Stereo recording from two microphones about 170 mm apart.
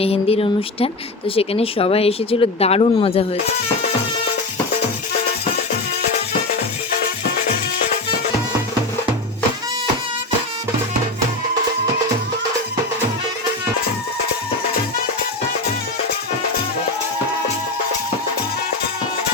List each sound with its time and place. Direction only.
0.0 s speech: 35° left (ahead or behind)